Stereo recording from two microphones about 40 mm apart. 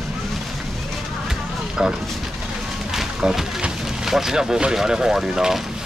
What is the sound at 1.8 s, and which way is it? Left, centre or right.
Speech, centre.